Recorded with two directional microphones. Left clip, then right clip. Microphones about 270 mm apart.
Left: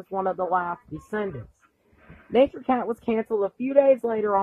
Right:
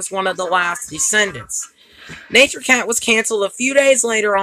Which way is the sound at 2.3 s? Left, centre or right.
Right.